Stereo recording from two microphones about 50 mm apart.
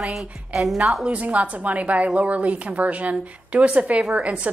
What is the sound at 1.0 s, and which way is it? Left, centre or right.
A woman's voice, right.